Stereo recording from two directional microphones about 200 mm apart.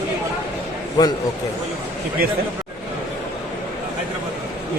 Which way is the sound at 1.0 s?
20° left (ahead or behind).